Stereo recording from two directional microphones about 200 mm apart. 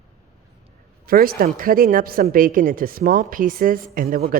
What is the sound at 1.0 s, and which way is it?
A woman's voice, 45° right (ahead or behind).